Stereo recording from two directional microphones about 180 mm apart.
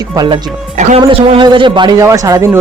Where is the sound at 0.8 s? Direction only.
35° right (ahead or behind); by 2.6 s 15° right (ahead or behind).